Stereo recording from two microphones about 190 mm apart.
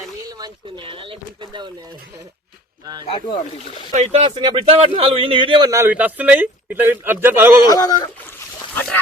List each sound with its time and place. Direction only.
0.3 s speech: 20° right (ahead or behind)
2.8 s speech: 20° right (ahead or behind)
3.1 s speech: 30° left (ahead or behind)
3.9 s a man's voice: 35° right (ahead or behind); by 7.6 s 10° right (ahead or behind)
7.6 s speech: 20° left (ahead or behind)
8.7 s speech: 10° left (ahead or behind)